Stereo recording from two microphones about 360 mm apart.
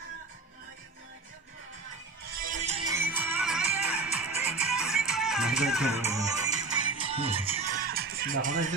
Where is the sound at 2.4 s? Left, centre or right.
Centre.